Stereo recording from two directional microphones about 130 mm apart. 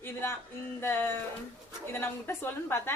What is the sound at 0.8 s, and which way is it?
A woman's voice, 15° left (ahead or behind).